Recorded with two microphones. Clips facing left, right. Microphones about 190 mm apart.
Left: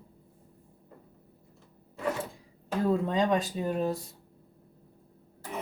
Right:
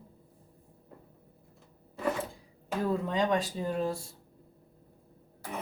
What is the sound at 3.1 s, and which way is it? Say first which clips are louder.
Speech: left 2 dB; 20° left (ahead or behind).